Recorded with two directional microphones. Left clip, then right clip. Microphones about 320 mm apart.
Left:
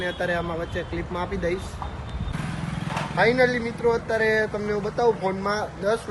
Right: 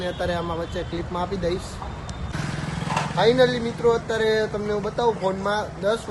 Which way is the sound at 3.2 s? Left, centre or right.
Centre.